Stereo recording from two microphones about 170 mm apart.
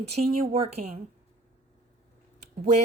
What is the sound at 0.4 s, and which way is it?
Speech, 40° right (ahead or behind).